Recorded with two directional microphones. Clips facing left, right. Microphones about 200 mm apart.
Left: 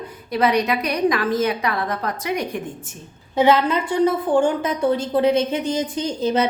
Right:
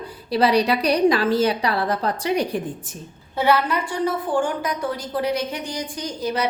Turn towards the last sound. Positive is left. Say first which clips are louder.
# left 5 dB
turn(degrees=25)  # may be behind; listen again after turning